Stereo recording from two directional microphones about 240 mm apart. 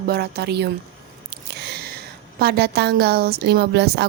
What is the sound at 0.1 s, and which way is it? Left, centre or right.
A woman's voice, right.